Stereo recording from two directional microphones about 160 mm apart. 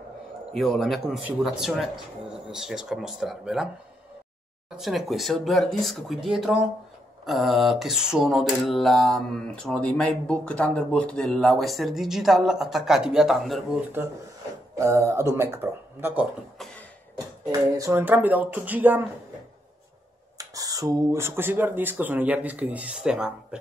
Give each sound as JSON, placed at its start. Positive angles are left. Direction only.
{"t": 0.5, "sound": "mantra", "side_deg": 0}
{"t": 4.6, "sound": "mantra", "side_deg": 0}
{"t": 14.8, "sound": "speech", "side_deg": -20}
{"t": 17.5, "sound": "speech", "side_deg": -20}
{"t": 20.3, "sound": "speech", "side_deg": -20}